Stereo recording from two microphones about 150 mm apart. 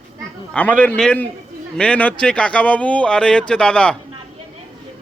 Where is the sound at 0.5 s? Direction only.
10° left (ahead or behind).